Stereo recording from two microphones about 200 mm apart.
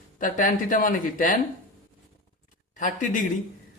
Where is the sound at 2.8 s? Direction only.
40° left (ahead or behind).